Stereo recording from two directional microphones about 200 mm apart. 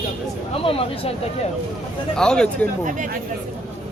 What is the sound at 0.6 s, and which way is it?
Speech, 30° left (ahead or behind).